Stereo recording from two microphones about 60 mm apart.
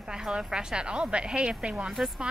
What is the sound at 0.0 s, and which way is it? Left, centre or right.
A woman's voice, centre.